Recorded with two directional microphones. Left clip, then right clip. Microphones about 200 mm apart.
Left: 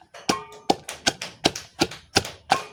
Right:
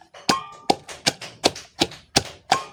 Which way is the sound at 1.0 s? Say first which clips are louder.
Right 2 dB; 5° right (ahead or behind).